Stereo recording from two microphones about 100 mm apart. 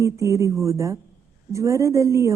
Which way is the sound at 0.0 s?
30° right (ahead or behind).